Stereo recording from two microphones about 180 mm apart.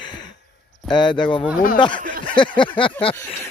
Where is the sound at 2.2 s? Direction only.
25° left (ahead or behind).